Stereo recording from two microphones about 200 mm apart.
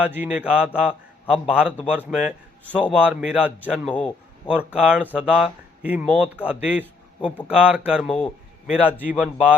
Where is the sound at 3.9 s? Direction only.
5° left (ahead or behind).